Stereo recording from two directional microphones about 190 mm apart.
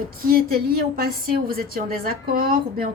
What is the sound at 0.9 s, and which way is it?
A woman's voice, 50° right (ahead or behind).